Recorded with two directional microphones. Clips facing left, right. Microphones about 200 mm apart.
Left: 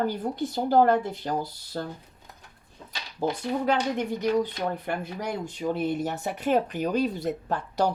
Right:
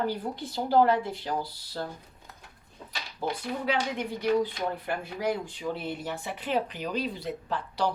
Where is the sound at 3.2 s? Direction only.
45° left (ahead or behind).